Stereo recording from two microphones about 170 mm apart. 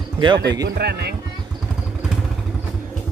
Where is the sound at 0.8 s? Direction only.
70° right (ahead or behind).